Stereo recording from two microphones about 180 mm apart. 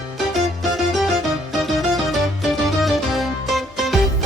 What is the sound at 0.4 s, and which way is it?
Music, centre (ahead or behind).